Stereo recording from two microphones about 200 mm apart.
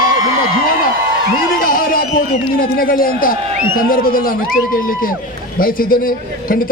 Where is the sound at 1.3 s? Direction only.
45° left (ahead or behind).